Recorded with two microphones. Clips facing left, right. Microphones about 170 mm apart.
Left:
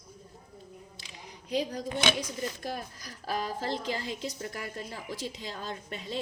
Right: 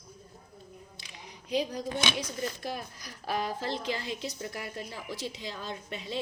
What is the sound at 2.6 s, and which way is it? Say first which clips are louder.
A woman's voice: even; 45° left (ahead or behind).